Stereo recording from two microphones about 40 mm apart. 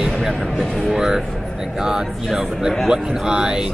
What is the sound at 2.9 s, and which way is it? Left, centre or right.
Speech, centre.